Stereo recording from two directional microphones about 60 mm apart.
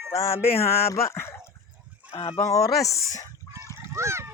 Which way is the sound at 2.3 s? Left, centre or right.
Left.